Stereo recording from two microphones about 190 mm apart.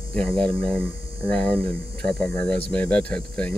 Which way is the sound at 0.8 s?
30° right (ahead or behind).